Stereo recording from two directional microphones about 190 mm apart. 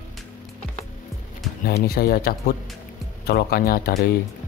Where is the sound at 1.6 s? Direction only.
55° left (ahead or behind).